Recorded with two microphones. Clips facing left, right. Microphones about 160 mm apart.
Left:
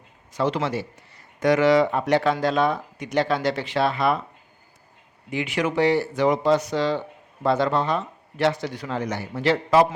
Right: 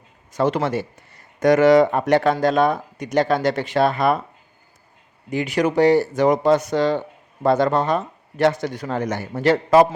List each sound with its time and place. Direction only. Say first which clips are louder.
0.3 s speech: right 4 dB; 50° right (ahead or behind)
5.3 s speech: right 4 dB; 40° right (ahead or behind)